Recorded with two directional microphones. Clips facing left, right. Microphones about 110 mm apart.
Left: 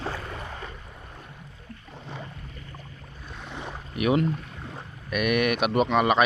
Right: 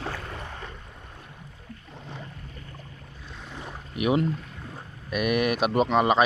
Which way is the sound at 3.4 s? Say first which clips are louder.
Left 3 dB; 75° left (ahead or behind).